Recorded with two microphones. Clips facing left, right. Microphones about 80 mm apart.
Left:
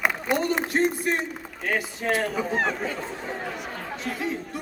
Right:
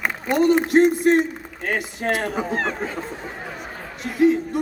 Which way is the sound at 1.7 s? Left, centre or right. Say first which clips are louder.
Right 2 dB; right.